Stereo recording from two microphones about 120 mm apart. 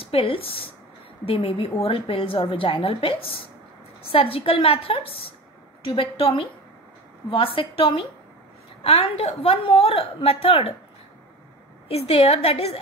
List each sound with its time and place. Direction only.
0.0 s a woman's voice: 50° left (ahead or behind)
11.9 s a woman's voice: 55° left (ahead or behind)